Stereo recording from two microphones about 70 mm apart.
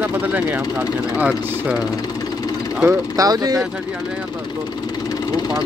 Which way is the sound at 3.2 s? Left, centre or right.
Right.